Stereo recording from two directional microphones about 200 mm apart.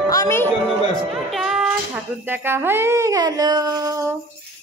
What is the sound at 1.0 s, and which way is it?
Music, centre (ahead or behind).